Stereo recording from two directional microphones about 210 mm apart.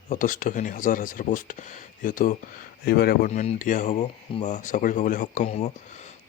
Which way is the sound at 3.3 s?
35° left (ahead or behind).